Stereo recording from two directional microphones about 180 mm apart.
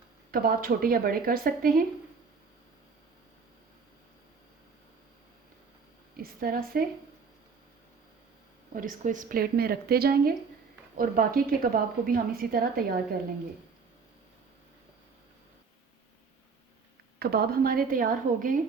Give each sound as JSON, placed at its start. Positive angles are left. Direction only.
{"t": 0.3, "sound": "speech", "side_deg": -55}
{"t": 6.4, "sound": "a woman's voice", "side_deg": -55}
{"t": 8.7, "sound": "a woman's voice", "side_deg": -50}
{"t": 17.2, "sound": "a woman's voice", "side_deg": -55}